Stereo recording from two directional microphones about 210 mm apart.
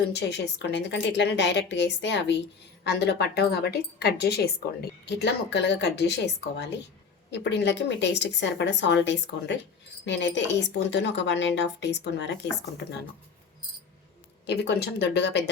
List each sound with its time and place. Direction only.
0.1 s a woman's voice: 55° left (ahead or behind)
14.4 s a woman's voice: 55° left (ahead or behind)